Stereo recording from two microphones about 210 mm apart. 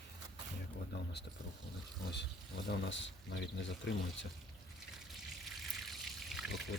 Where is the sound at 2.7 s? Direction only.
60° left (ahead or behind).